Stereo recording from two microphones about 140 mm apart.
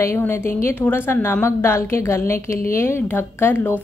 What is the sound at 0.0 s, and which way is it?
A woman's voice, 20° left (ahead or behind).